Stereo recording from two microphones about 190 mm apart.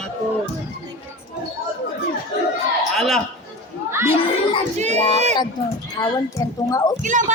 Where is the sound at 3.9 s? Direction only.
15° right (ahead or behind).